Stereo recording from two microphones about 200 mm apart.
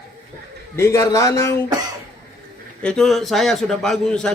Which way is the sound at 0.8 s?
15° left (ahead or behind).